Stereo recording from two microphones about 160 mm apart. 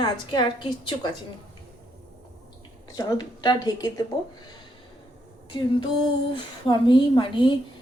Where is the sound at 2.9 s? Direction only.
25° left (ahead or behind).